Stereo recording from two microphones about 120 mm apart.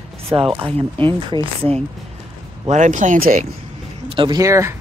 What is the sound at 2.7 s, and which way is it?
Speech, 90° right.